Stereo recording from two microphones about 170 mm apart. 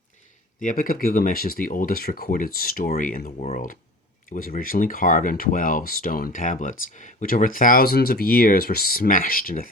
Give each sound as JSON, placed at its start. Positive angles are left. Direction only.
{"t": 0.6, "sound": "speech", "side_deg": 55}